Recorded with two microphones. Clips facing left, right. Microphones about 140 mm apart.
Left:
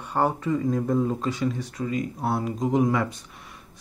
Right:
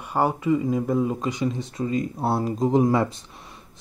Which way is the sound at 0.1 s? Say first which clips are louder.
Right 2 dB; 10° right (ahead or behind).